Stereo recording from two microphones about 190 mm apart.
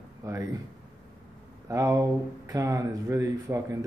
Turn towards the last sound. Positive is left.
turn(degrees=-15)  # may be behind; listen again after turning